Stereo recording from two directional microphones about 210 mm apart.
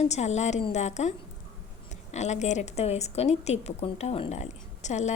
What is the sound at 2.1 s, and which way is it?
A woman's voice, 35° left (ahead or behind).